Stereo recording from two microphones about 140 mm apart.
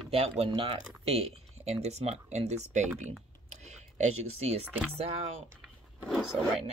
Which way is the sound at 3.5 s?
55° right (ahead or behind).